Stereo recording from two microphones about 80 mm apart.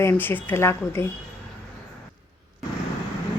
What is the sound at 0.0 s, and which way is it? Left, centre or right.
Speech, left.